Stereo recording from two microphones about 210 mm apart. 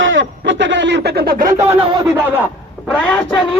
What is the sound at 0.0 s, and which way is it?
Speech, 65° right (ahead or behind).